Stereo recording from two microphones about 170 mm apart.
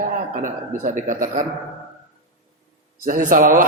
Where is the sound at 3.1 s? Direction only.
50° right (ahead or behind).